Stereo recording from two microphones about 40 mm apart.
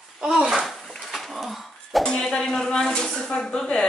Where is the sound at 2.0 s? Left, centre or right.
Centre.